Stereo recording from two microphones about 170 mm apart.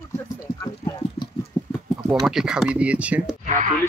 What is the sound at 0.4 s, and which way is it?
Clip-clop, 25° left (ahead or behind).